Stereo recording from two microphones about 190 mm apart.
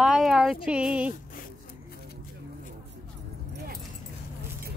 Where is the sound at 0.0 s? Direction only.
Centre (ahead or behind).